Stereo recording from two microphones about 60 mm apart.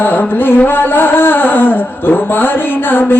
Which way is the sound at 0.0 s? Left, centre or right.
Left.